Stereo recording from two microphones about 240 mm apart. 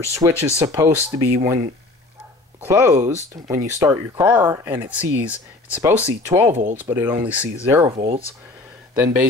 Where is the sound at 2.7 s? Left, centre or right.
Centre.